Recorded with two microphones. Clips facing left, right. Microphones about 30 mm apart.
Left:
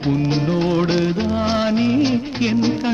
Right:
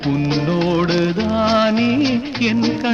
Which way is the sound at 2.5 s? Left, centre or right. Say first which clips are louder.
Even; right.